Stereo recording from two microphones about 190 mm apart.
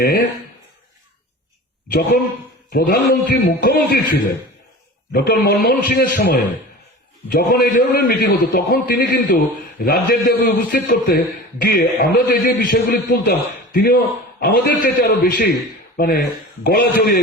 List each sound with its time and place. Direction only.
0.0 s a man's voice: 55° left (ahead or behind)
2.7 s a man's voice: 55° left (ahead or behind)